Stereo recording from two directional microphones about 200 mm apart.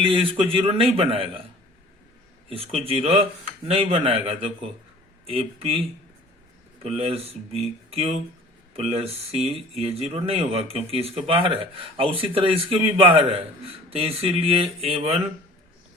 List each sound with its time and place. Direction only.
0.1 s speech: 30° right (ahead or behind)
2.5 s speech: 30° right (ahead or behind)
6.8 s speech: 30° right (ahead or behind)